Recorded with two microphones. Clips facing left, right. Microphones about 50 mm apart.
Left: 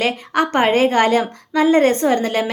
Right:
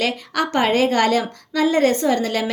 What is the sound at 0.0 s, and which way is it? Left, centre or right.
A woman's voice, left.